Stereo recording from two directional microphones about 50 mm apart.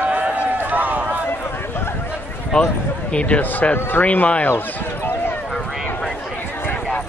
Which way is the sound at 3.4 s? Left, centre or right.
Left.